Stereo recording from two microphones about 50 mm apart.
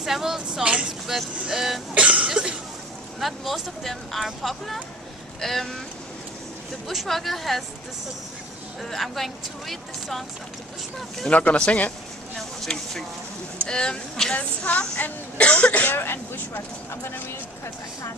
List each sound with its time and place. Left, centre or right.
0.0 s speech: centre
0.8 s vehicle: centre
1.4 s speech: centre
2.0 s cough: centre
3.2 s speech: centre
6.9 s speech: centre
8.9 s speech: centre
11.2 s speech: left
12.6 s speech: centre
14.3 s speech: left
16.0 s speech: left